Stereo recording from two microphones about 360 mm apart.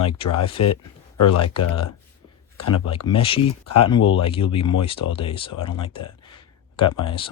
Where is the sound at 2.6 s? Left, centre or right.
Left.